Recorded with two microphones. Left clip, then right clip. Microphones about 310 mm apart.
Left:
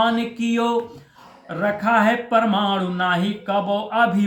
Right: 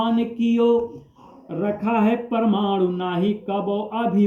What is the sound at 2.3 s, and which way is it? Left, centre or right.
Speech, left.